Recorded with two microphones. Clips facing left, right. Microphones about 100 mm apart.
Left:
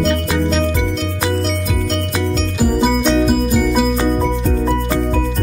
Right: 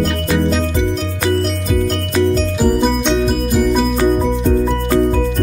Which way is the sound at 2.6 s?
5° left (ahead or behind).